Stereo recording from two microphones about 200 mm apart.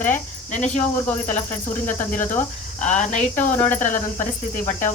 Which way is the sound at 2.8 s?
35° left (ahead or behind).